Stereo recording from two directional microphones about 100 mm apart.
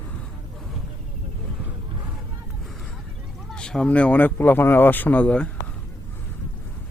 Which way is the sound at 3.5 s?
10° left (ahead or behind).